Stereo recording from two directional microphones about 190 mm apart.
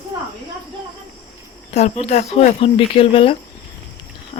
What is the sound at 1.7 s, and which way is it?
Speech, 35° left (ahead or behind).